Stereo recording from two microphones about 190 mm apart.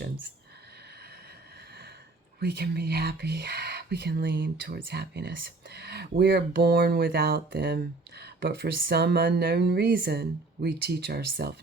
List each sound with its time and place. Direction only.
2.4 s speech: 55° right (ahead or behind)